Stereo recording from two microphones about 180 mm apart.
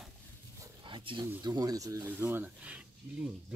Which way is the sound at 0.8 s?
30° right (ahead or behind).